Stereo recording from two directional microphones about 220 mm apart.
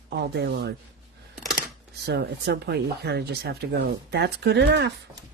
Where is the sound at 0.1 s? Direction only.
50° right (ahead or behind).